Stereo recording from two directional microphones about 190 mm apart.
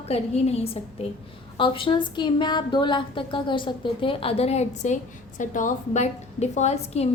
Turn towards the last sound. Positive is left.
turn(degrees=35)  # may be behind; listen again after turning